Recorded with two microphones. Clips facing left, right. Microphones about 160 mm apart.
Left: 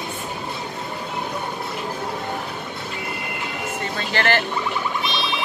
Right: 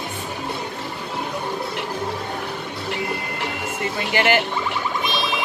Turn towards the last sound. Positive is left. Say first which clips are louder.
# right 2 dB
turn(degrees=-15)  # may be behind; listen again after turning